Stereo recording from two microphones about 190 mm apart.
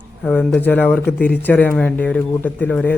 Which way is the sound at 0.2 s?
5° left (ahead or behind).